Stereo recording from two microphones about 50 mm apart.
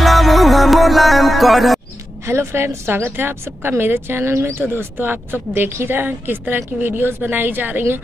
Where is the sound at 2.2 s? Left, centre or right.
Right.